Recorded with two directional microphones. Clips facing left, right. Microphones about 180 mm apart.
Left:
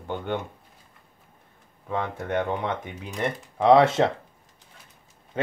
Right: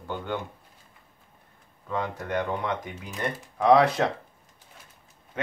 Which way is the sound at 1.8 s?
25° left (ahead or behind).